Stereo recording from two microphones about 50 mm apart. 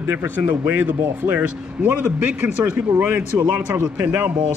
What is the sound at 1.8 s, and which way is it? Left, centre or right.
Speech, right.